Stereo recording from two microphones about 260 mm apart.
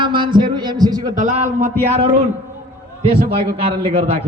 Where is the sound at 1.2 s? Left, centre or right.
Right.